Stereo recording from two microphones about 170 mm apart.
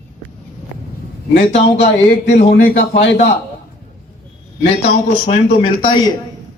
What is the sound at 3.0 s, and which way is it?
Speech, 90° left.